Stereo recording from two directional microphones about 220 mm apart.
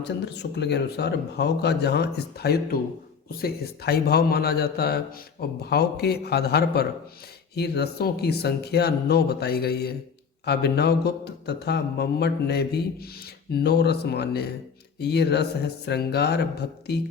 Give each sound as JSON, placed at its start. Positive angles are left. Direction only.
{"t": 0.0, "sound": "a man's voice", "side_deg": 50}